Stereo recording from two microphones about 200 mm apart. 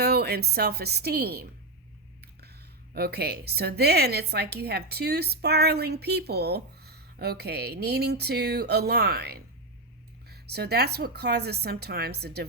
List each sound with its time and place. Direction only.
0.0 s a woman's voice: 55° right (ahead or behind)